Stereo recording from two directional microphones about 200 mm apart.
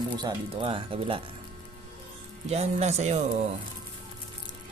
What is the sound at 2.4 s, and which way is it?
Speech, 35° right (ahead or behind).